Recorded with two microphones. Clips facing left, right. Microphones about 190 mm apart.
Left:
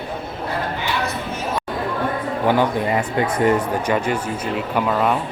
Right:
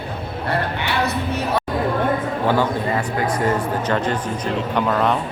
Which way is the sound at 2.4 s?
15° left (ahead or behind).